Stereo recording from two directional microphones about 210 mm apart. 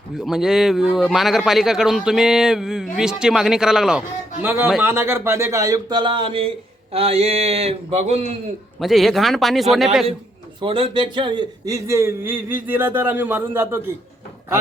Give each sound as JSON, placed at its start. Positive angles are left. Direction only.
{"t": 0.2, "sound": "a man's voice", "side_deg": 0}
{"t": 8.8, "sound": "speech", "side_deg": 0}
{"t": 10.6, "sound": "a man's voice", "side_deg": -25}